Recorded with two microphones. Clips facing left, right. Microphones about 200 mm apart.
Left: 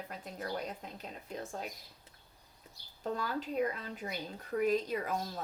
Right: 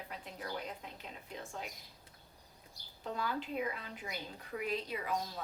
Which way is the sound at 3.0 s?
40° left (ahead or behind).